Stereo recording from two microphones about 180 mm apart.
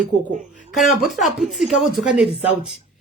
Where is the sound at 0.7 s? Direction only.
Centre (ahead or behind).